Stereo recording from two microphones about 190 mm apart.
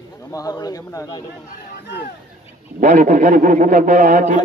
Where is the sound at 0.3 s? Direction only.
20° left (ahead or behind).